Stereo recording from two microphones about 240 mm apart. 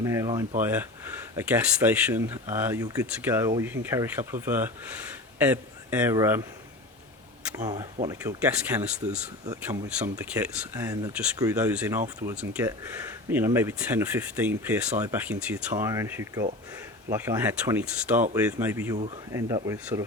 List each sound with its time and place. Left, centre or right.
0.0 s a man's voice: centre
7.5 s speech: centre